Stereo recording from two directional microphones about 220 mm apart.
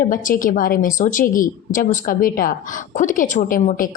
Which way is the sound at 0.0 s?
40° left (ahead or behind).